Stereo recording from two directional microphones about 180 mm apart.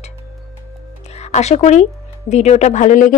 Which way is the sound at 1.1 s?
40° left (ahead or behind).